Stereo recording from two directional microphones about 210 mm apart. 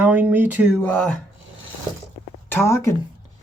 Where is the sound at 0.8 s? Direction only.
5° left (ahead or behind).